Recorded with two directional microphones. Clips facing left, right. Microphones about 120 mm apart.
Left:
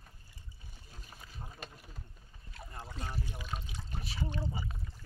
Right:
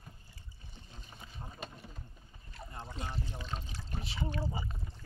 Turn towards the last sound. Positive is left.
turn(degrees=-25)  # may be behind; listen again after turning